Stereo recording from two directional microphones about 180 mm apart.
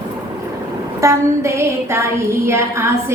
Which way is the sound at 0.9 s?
15° right (ahead or behind).